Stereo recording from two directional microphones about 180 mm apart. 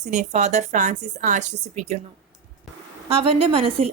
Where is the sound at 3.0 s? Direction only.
35° right (ahead or behind).